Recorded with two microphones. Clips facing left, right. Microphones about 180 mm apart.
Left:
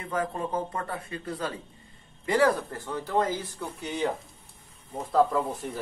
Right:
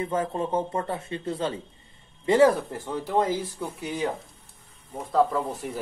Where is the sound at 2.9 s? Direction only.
10° right (ahead or behind).